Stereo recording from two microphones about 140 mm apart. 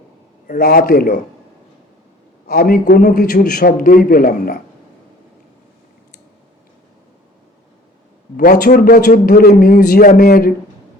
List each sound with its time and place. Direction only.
0.4 s a man's voice: 90° left
2.5 s a man's voice: 90° left
8.4 s a man's voice: 90° left